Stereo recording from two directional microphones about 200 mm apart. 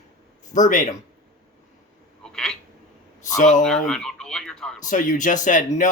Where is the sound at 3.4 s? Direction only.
40° left (ahead or behind).